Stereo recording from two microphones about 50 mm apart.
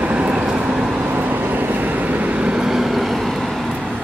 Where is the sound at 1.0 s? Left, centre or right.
Right; by 3.9 s centre.